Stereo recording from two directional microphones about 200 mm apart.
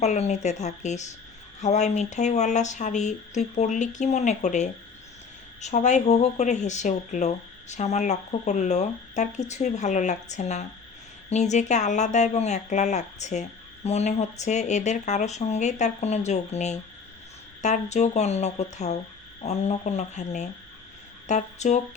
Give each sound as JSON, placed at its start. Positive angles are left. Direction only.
{"t": 0.0, "sound": "speech", "side_deg": 35}